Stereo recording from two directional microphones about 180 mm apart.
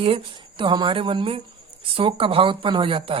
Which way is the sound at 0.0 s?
30° right (ahead or behind).